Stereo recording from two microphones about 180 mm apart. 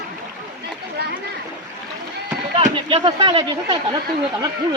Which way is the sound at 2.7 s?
25° right (ahead or behind).